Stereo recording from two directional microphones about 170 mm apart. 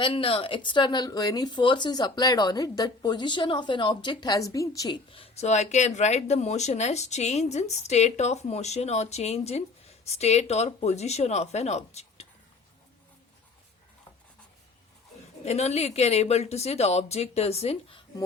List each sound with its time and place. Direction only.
0.0 s speech: 35° left (ahead or behind)
15.4 s speech: 40° left (ahead or behind)